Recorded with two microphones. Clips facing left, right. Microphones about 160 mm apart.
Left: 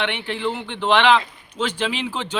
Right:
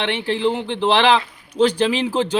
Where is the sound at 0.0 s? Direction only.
35° right (ahead or behind).